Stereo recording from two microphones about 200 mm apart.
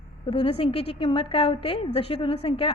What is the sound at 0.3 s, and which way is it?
A woman's voice, 30° left (ahead or behind).